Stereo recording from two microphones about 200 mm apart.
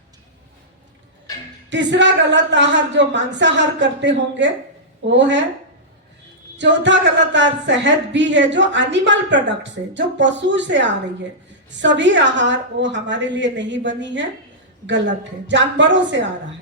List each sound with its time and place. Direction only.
1.7 s speech: 65° right (ahead or behind)
6.6 s speech: 65° right (ahead or behind)
15.4 s speech: 65° right (ahead or behind)